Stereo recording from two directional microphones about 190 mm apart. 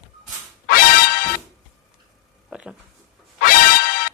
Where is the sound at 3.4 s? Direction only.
45° left (ahead or behind).